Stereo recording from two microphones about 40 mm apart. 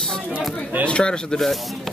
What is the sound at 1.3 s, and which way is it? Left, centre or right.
Speech, centre.